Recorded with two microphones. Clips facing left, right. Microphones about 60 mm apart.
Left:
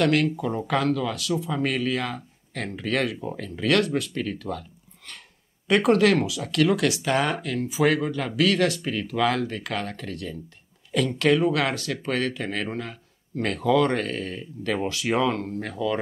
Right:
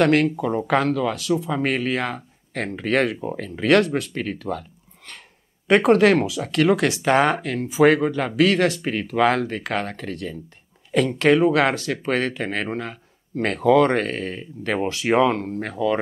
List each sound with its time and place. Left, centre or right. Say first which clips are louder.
0.0 s speech: right 4 dB; right